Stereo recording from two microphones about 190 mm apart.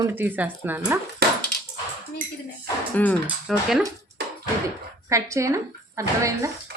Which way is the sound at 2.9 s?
10° left (ahead or behind).